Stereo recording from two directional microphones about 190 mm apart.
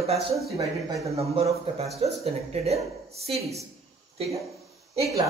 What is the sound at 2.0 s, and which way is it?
Speech, 35° right (ahead or behind).